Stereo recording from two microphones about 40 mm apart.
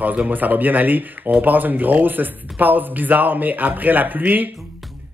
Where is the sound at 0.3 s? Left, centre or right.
Right.